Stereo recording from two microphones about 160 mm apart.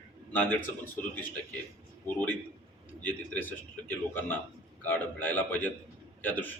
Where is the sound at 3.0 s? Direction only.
10° left (ahead or behind).